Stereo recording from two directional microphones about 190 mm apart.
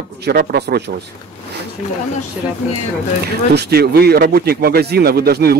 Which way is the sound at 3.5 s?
55° right (ahead or behind).